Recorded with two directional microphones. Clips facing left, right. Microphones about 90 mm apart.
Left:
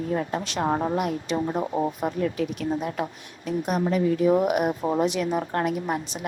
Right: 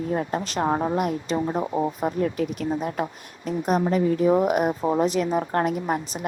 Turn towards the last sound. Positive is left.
turn(degrees=-40)  # may be behind; listen again after turning